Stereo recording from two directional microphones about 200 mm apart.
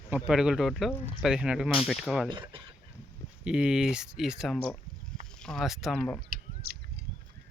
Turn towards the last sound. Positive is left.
turn(degrees=-45)  # may be behind; listen again after turning